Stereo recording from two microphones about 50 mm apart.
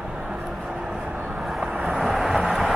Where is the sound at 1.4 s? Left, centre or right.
Centre.